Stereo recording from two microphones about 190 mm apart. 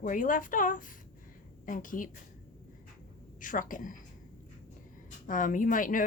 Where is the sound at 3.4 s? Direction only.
45° left (ahead or behind).